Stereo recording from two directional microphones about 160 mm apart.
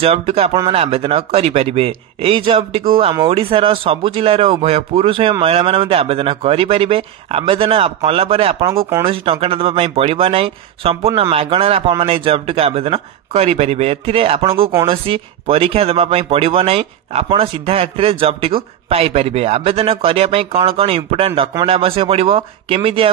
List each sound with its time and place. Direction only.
0.0 s speech: 40° right (ahead or behind)